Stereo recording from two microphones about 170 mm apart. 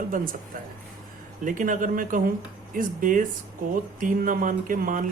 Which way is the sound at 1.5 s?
50° right (ahead or behind).